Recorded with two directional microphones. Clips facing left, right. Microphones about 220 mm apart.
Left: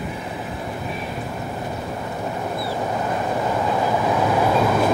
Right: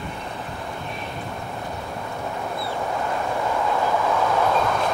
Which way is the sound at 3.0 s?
20° left (ahead or behind).